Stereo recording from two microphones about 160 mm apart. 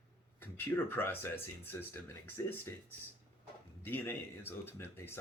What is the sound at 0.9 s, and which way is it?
Speech, 15° left (ahead or behind).